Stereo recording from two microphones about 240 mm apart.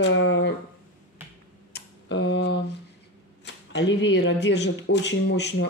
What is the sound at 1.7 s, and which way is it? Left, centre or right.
Speech, left.